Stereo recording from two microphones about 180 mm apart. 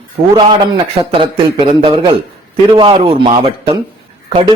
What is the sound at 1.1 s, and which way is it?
Speech, 25° right (ahead or behind).